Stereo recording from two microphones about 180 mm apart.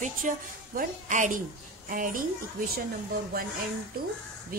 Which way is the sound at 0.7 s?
45° right (ahead or behind).